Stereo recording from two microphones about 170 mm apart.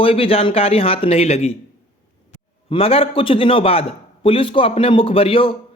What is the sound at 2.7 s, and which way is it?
Speech, 35° left (ahead or behind).